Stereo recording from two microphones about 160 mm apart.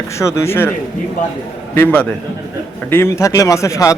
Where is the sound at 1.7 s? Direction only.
10° left (ahead or behind).